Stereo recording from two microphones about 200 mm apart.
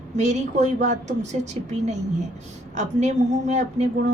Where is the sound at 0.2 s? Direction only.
35° right (ahead or behind).